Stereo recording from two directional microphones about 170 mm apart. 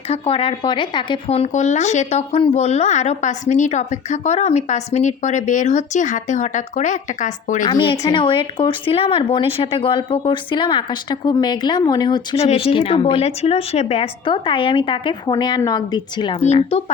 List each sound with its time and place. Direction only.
0.1 s speech: 35° left (ahead or behind)
7.6 s speech: 25° left (ahead or behind)
12.4 s speech: 35° left (ahead or behind)